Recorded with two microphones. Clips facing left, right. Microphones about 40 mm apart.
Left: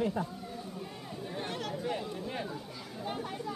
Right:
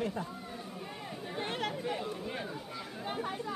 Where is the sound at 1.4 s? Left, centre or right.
Right.